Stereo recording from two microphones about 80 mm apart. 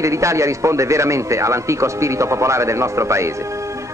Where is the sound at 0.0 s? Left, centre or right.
Right.